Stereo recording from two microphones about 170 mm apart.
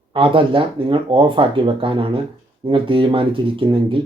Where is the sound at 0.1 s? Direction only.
30° right (ahead or behind).